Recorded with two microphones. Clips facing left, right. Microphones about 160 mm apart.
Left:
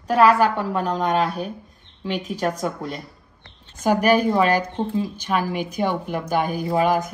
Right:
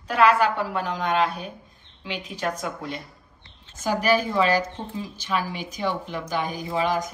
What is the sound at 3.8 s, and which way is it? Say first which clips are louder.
A woman's voice: left 5 dB; 50° left (ahead or behind).